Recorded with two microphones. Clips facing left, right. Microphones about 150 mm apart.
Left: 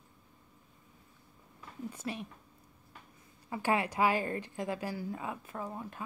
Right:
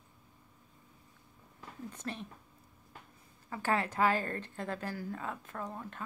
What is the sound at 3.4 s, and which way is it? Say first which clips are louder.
A woman's voice: left 2 dB; 15° left (ahead or behind).